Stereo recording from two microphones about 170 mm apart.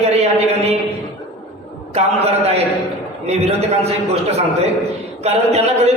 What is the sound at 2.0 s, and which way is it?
A man's voice, 35° right (ahead or behind).